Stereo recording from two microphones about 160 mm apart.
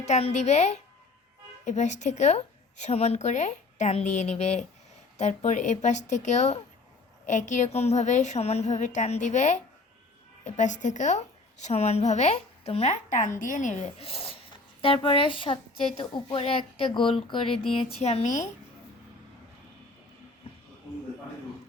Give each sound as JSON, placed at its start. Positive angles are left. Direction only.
{"t": 0.0, "sound": "a woman's voice", "side_deg": 45}